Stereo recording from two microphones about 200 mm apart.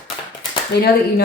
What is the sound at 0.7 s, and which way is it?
Speech, 50° left (ahead or behind).